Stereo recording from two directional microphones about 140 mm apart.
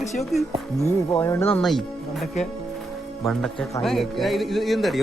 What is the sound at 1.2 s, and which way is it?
Speech, 15° left (ahead or behind).